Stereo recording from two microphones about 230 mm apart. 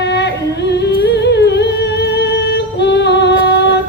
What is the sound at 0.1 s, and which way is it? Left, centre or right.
Music, left.